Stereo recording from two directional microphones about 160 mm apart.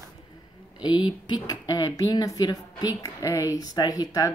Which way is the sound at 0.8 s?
30° left (ahead or behind).